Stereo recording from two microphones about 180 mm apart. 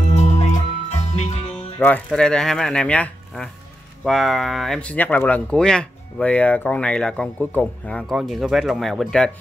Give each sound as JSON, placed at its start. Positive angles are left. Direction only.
{"t": 0.1, "sound": "music", "side_deg": 40}
{"t": 1.5, "sound": "speech", "side_deg": 5}